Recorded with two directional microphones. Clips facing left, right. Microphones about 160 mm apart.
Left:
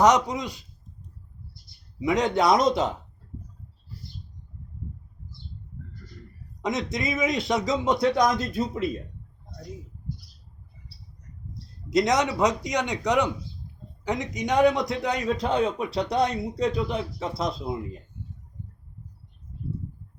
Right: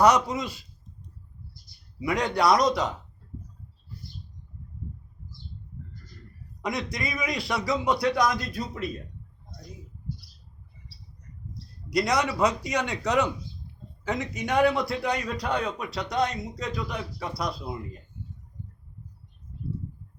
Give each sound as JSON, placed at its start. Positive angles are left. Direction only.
{"t": 0.0, "sound": "a man's voice", "side_deg": 15}
{"t": 2.0, "sound": "a man's voice", "side_deg": 20}
{"t": 6.6, "sound": "a man's voice", "side_deg": 20}
{"t": 11.9, "sound": "a man's voice", "side_deg": 20}